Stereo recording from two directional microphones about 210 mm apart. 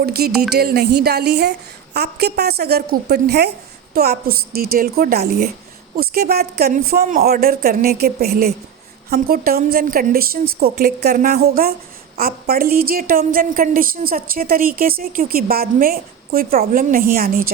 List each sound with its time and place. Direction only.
0.0 s a woman's voice: 50° right (ahead or behind)